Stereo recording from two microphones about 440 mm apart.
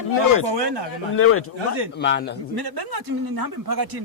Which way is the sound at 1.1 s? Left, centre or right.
Left.